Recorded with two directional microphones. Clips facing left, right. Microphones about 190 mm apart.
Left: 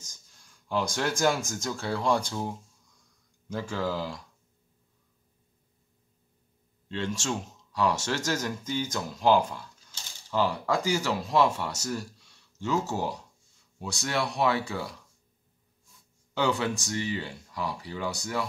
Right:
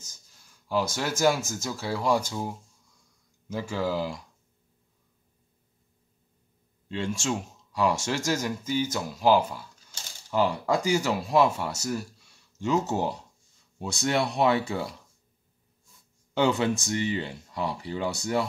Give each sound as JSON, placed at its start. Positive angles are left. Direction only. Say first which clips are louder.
{"t": 0.7, "sound": "speech", "louder": "right 1 dB", "side_deg": -5}
{"t": 6.9, "sound": "speech", "louder": "right 2 dB", "side_deg": -10}
{"t": 16.3, "sound": "speech", "louder": "right 3 dB", "side_deg": -20}